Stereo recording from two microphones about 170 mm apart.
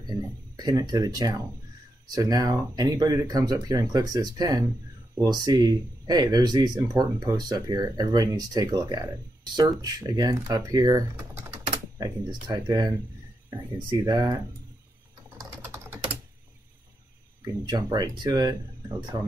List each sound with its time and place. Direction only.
0.6 s speech: 25° right (ahead or behind)
15.3 s typing: 20° right (ahead or behind)
17.6 s speech: 25° right (ahead or behind)